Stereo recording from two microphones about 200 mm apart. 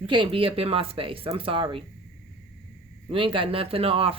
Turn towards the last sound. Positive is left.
turn(degrees=-25)  # may be behind; listen again after turning